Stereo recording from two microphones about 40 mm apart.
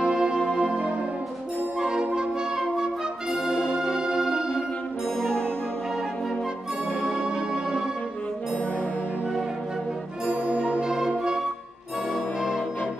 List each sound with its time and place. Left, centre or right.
0.0 s music: centre
1.8 s brass instrument: centre
5.2 s music: centre
7.1 s music: centre
10.3 s music: right